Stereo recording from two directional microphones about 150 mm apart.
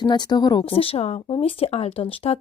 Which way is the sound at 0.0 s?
30° left (ahead or behind).